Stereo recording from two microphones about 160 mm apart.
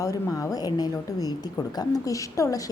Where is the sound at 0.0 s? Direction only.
20° left (ahead or behind).